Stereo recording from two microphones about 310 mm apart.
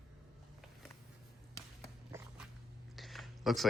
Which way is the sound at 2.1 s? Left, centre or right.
Centre.